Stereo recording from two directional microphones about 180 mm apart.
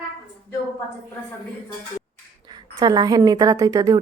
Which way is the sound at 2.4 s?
25° right (ahead or behind).